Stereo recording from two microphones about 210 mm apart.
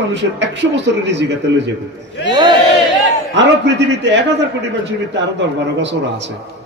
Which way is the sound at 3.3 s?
55° right (ahead or behind).